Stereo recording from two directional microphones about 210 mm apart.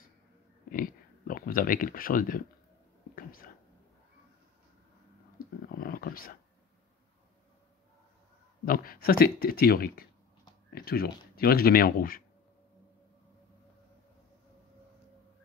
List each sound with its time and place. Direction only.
0.7 s speech: 40° left (ahead or behind)
3.2 s whispering: 40° left (ahead or behind)
5.8 s a sound: 45° left (ahead or behind)
8.6 s speech: 45° left (ahead or behind)